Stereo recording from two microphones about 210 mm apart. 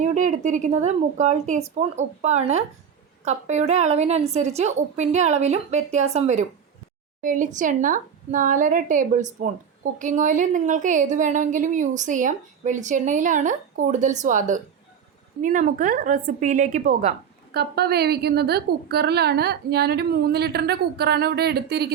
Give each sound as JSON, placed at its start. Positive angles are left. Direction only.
{"t": 0.0, "sound": "a woman's voice", "side_deg": -35}